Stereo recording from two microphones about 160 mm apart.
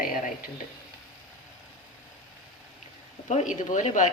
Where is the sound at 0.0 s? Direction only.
60° left (ahead or behind).